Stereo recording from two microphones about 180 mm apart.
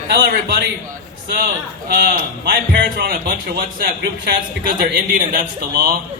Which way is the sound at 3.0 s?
55° right (ahead or behind).